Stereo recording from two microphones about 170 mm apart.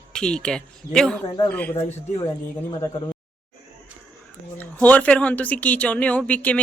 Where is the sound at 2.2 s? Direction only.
20° left (ahead or behind).